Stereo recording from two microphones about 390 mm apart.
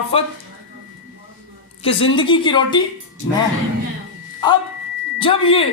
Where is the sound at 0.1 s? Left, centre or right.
Centre.